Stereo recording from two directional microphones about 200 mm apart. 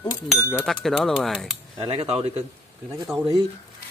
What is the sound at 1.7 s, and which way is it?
Speech, 25° right (ahead or behind).